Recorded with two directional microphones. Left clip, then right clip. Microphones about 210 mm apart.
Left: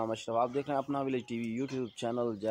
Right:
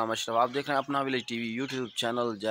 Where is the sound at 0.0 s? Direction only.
5° right (ahead or behind).